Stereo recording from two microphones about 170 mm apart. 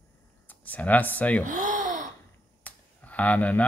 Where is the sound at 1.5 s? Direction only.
50° right (ahead or behind).